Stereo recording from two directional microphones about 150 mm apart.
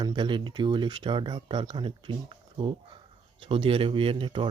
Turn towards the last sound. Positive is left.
turn(degrees=-35)  # may be behind; listen again after turning